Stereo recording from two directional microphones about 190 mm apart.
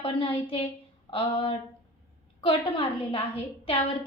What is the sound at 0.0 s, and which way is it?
A woman's voice, 30° left (ahead or behind).